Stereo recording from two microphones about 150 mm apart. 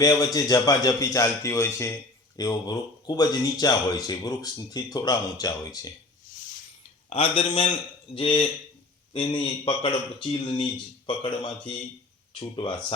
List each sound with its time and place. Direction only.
0.0 s speech: 25° left (ahead or behind)
7.1 s speech: 35° left (ahead or behind)